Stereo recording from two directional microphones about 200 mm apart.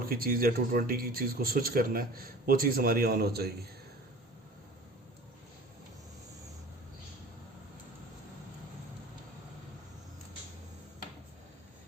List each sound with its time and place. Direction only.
0.0 s speech: 50° right (ahead or behind)